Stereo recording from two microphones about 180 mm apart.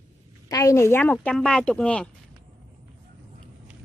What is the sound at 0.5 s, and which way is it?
Speech, 15° left (ahead or behind).